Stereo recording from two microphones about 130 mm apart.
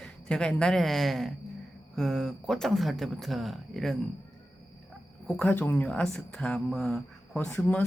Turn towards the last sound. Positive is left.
turn(degrees=5)  # may be behind; listen again after turning